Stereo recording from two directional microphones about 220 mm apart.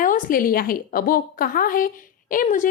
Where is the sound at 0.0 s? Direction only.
40° left (ahead or behind).